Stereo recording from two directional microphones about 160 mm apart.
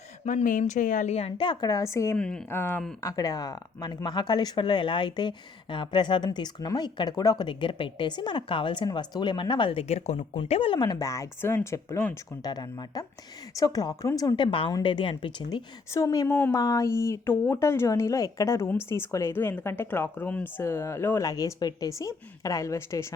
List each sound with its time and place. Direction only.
0.3 s a woman's voice: 55° left (ahead or behind); by 2.1 s 20° left (ahead or behind)
2.1 s a woman's voice: 5° left (ahead or behind)